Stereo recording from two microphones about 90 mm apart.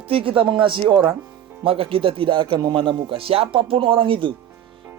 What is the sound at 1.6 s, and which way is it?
Speech, 90° right.